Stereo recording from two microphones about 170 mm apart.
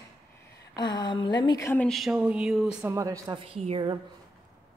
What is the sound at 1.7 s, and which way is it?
A man's voice, 5° left (ahead or behind).